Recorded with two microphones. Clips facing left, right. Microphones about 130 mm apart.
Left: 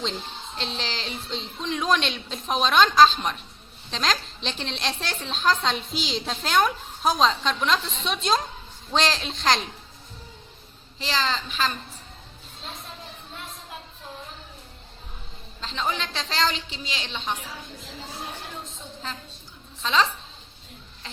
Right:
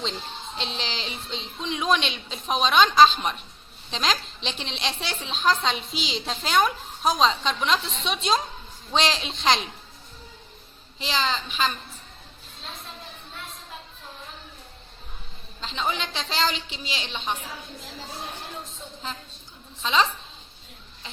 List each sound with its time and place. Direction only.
0.0 s a woman's voice: 5° right (ahead or behind)
11.0 s a woman's voice: 5° right (ahead or behind)
15.6 s a woman's voice: 5° right (ahead or behind)
16.6 s a woman's voice: 30° left (ahead or behind)
16.9 s a woman's voice: 10° right (ahead or behind)
19.8 s a woman's voice: 5° right (ahead or behind)